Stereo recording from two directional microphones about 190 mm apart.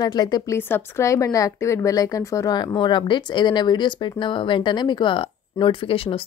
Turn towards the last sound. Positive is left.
turn(degrees=30)  # may be behind; listen again after turning